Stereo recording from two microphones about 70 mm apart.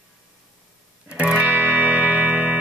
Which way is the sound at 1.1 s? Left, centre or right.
Centre.